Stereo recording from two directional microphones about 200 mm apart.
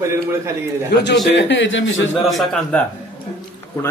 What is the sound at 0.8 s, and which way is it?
Speech, 55° left (ahead or behind).